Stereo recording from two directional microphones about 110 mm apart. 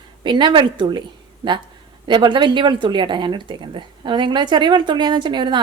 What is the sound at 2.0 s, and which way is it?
Speech, 45° right (ahead or behind).